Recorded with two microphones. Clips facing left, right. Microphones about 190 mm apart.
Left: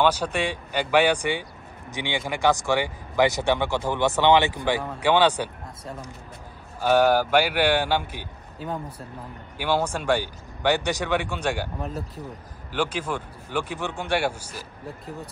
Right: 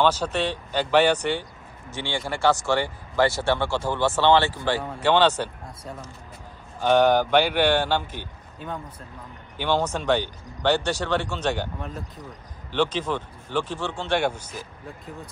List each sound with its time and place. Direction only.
0.0 s speech: 10° left (ahead or behind)
6.8 s speech: 5° left (ahead or behind)